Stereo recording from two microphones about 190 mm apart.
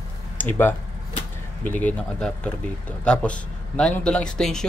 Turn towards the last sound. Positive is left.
turn(degrees=5)  # may be behind; listen again after turning